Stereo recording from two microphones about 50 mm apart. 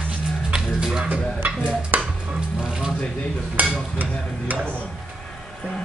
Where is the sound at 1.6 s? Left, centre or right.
Right.